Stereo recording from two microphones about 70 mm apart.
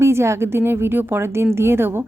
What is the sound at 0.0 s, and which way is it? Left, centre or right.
A woman's voice, right.